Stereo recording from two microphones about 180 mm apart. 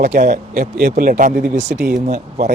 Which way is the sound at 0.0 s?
65° right (ahead or behind).